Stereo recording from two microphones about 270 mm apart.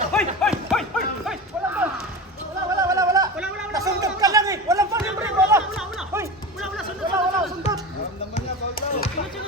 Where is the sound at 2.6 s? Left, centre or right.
Centre.